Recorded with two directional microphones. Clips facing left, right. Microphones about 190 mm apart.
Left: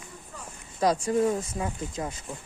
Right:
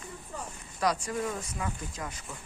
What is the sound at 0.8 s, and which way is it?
Speech, 25° left (ahead or behind).